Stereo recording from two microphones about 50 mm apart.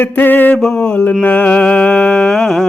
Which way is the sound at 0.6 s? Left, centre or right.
Centre.